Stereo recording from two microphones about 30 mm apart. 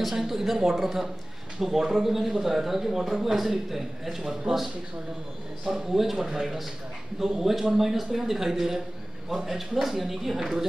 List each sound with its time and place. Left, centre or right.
0.1 s speech: centre
5.7 s speech: centre
6.1 s speech: centre
6.4 s a man's voice: centre